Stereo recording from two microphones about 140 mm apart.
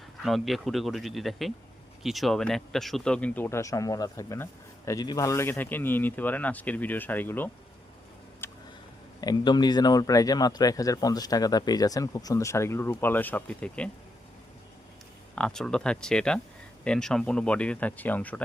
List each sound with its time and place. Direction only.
0.2 s speech: centre (ahead or behind)
9.2 s speech: 30° left (ahead or behind); by 13.9 s 10° left (ahead or behind)
15.4 s speech: 5° left (ahead or behind)